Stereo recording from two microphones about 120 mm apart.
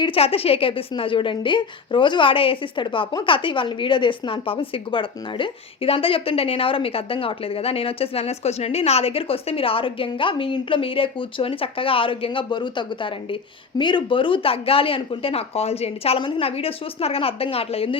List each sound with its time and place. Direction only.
0.0 s a woman's voice: 50° left (ahead or behind)